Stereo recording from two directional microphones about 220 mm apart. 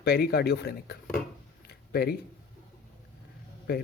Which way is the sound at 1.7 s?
45° left (ahead or behind).